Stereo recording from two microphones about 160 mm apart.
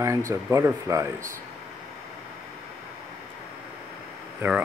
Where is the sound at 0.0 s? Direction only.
20° right (ahead or behind).